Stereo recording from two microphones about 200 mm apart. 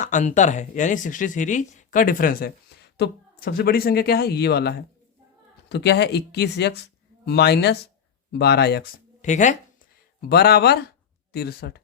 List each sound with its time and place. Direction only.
0.0 s speech: 40° left (ahead or behind)
10.2 s speech: 55° left (ahead or behind)